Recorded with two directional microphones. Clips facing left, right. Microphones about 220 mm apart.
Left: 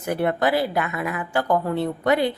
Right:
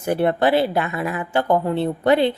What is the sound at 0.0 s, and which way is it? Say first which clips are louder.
A woman's voice: right 3 dB; 30° right (ahead or behind).